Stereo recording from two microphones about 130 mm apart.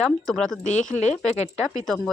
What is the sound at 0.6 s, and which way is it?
Speech, 70° left (ahead or behind).